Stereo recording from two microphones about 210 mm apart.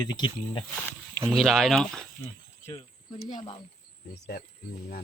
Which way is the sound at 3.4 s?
25° left (ahead or behind).